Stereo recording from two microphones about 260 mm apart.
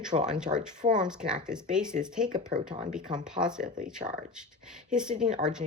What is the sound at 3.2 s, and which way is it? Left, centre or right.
Speech, centre.